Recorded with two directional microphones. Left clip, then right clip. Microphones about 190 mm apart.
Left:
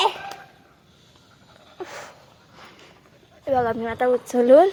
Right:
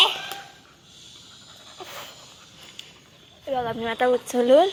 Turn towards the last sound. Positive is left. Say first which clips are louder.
# left 3 dB
turn(degrees=25)  # may be behind; listen again after turning